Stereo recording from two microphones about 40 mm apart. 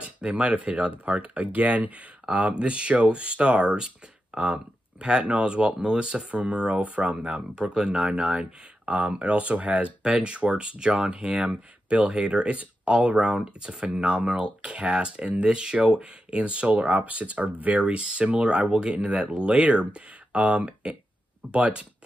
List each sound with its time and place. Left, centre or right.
0.0 s speech: right
7.5 s speech: centre